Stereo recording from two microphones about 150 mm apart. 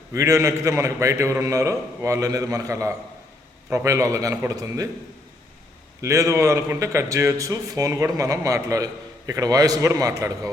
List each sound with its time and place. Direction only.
0.1 s a man's voice: 20° right (ahead or behind)
6.0 s a man's voice: 20° right (ahead or behind)